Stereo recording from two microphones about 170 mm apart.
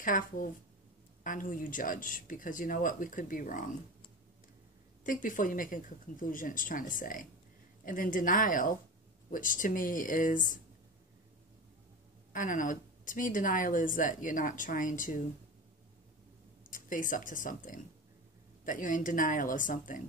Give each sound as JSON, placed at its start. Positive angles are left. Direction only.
{"t": 0.0, "sound": "a woman's voice", "side_deg": 50}
{"t": 5.0, "sound": "a woman's voice", "side_deg": 50}
{"t": 12.3, "sound": "a woman's voice", "side_deg": 50}
{"t": 16.6, "sound": "a woman's voice", "side_deg": 50}